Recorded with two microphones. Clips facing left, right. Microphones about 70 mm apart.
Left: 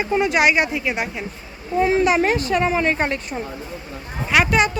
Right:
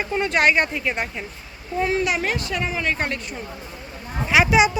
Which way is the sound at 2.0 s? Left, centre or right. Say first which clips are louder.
Left 6 dB; left.